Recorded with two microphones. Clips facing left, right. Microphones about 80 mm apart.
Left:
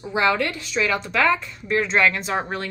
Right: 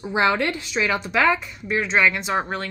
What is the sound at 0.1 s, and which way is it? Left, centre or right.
A woman's voice, right.